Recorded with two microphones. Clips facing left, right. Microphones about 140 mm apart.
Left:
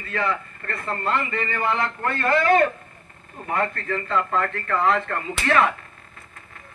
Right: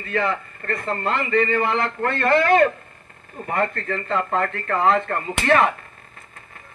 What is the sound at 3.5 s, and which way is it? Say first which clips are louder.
A man's voice: right 1 dB; 50° right (ahead or behind).